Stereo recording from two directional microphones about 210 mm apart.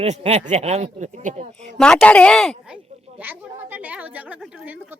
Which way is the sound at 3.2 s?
10° right (ahead or behind).